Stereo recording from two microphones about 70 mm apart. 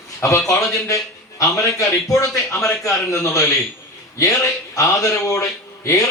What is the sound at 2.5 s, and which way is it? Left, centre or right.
Speech, centre.